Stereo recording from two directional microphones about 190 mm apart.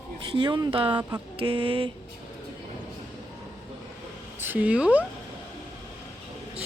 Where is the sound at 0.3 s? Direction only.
25° right (ahead or behind).